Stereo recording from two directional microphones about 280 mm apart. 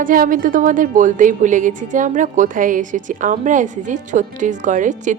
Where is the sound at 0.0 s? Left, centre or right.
Right.